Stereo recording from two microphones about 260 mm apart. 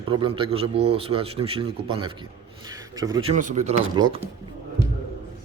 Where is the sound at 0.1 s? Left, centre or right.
Centre.